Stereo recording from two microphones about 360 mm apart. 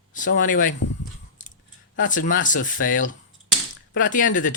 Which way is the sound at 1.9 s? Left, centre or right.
Left.